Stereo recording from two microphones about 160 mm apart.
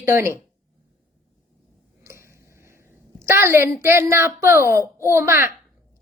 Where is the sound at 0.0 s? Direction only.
15° right (ahead or behind).